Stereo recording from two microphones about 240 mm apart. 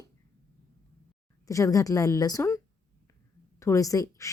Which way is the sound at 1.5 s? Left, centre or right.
Centre.